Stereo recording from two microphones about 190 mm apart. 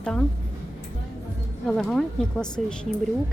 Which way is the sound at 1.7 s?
5° left (ahead or behind).